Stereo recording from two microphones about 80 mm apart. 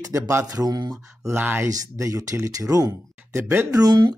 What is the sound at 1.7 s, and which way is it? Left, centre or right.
Speech, right.